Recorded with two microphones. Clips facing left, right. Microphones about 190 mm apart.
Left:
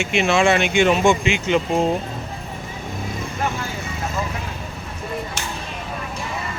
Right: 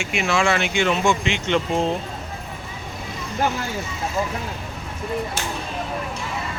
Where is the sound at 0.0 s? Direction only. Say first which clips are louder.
Left 4 dB; 25° left (ahead or behind); by 1.9 s 5° left (ahead or behind).